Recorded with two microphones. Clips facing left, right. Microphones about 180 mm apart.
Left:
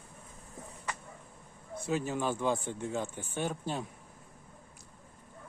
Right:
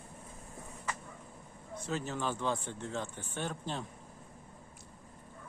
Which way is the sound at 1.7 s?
10° left (ahead or behind).